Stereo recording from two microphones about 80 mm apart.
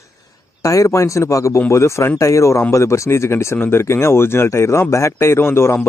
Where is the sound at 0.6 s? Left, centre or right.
Left.